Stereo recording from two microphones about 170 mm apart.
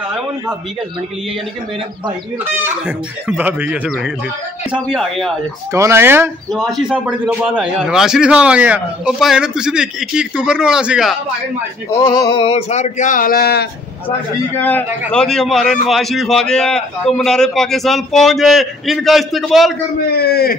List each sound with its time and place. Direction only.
2.8 s a man's voice: 5° right (ahead or behind)
5.7 s speech: 15° right (ahead or behind)
6.5 s a man's voice: centre (ahead or behind)
11.9 s speech: 20° left (ahead or behind); by 13.7 s 65° left (ahead or behind)
14.6 s a man's voice: 10° left (ahead or behind)
20.2 s a man's voice: 70° left (ahead or behind)